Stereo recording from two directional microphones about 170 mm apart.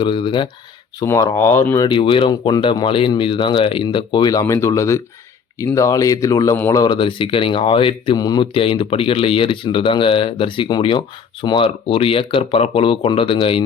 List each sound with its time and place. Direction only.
0.0 s speech: 30° left (ahead or behind)
0.9 s speech: 20° left (ahead or behind)
1.9 s speech: 30° left (ahead or behind)